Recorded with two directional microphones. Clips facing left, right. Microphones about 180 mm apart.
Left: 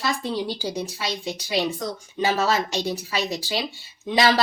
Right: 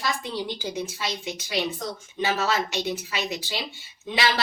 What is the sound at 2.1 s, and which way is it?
Speech, 35° left (ahead or behind).